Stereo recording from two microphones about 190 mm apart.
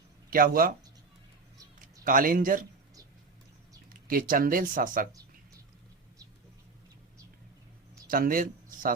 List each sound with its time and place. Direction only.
0.3 s speech: 50° right (ahead or behind)
1.8 s a man's voice: 45° right (ahead or behind)
4.1 s speech: 50° right (ahead or behind)
8.0 s speech: 50° right (ahead or behind)